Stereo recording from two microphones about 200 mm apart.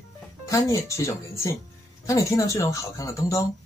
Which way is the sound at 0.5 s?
15° left (ahead or behind).